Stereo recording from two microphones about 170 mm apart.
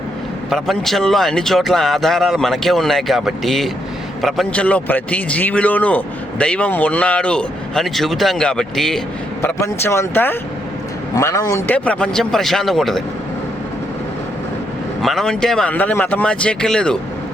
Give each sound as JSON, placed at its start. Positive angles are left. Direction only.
{"t": 0.5, "sound": "speech", "side_deg": 0}
{"t": 9.4, "sound": "a man's voice", "side_deg": 15}
{"t": 11.9, "sound": "speech", "side_deg": 5}
{"t": 15.0, "sound": "speech", "side_deg": 0}